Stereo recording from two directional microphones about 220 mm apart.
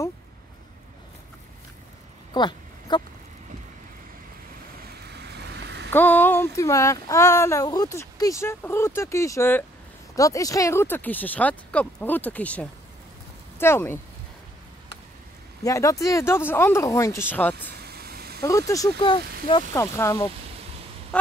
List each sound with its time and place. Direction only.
2.3 s a sound: 20° left (ahead or behind)
5.2 s vehicle: 50° right (ahead or behind)
5.9 s speech: 10° left (ahead or behind)
15.6 s speech: 15° left (ahead or behind)
17.8 s vehicle: 45° right (ahead or behind)
18.4 s speech: 15° left (ahead or behind)
21.1 s goose: 5° left (ahead or behind)